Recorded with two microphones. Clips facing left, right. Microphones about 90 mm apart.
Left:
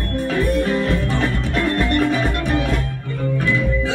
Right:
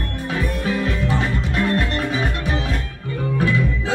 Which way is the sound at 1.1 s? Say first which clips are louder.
Left 1 dB; 15° right (ahead or behind).